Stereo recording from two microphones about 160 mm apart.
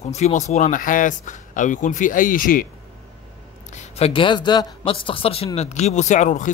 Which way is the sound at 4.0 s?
30° left (ahead or behind).